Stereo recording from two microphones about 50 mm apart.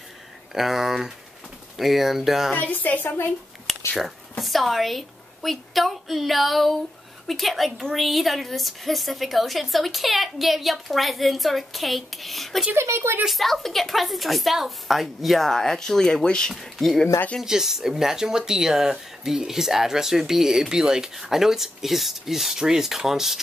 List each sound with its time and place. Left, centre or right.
0.6 s a woman's voice: centre
2.5 s a woman's voice: left
3.9 s a woman's voice: centre
12.7 s speech: right
13.3 s a woman's voice: centre
16.5 s a woman's voice: centre